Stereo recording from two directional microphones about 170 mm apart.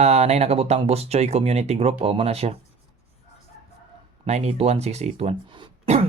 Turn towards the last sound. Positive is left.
turn(degrees=-30)  # may be behind; listen again after turning